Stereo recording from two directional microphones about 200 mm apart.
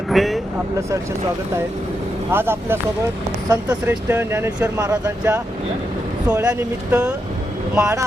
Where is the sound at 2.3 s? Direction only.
10° right (ahead or behind).